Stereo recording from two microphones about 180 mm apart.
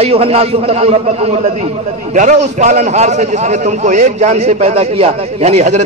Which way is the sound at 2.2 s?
40° right (ahead or behind).